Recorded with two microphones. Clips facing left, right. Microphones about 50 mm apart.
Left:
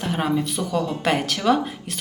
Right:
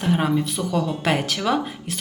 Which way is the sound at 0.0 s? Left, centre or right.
Centre.